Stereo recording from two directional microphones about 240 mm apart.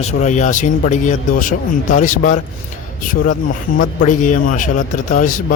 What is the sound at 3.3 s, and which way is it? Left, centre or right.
Speech, left.